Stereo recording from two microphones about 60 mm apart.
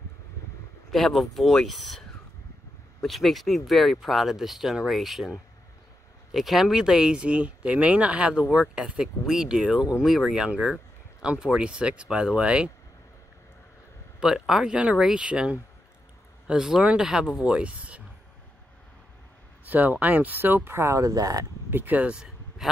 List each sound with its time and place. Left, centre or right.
0.9 s speech: centre
14.2 s speech: centre
19.7 s speech: right
20.7 s speech: right
21.0 s speech: right
21.6 s speech: right
22.6 s a sound: centre